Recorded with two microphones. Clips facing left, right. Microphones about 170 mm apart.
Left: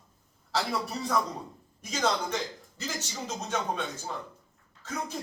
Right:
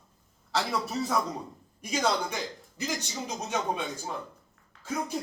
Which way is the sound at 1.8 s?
10° right (ahead or behind).